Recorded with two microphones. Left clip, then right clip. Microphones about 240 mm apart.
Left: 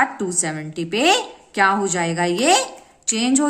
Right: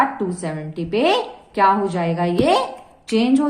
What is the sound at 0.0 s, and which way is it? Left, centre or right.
A woman's voice, left.